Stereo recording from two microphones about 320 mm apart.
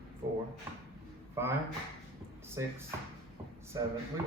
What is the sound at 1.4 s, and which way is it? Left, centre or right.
Speech, centre.